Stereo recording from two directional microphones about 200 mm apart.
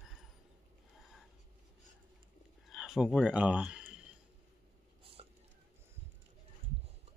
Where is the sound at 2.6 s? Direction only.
5° right (ahead or behind).